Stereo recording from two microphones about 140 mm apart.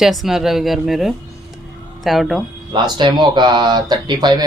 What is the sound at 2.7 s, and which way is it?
Speech, 30° right (ahead or behind).